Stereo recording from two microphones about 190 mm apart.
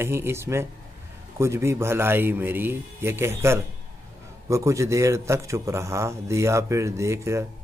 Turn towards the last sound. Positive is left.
turn(degrees=-15)  # may be behind; listen again after turning